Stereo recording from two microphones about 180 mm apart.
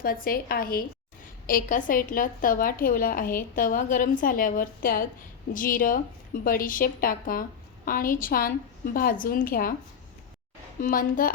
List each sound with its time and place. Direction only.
0.0 s a woman's voice: 55° left (ahead or behind)
10.8 s a woman's voice: 50° left (ahead or behind)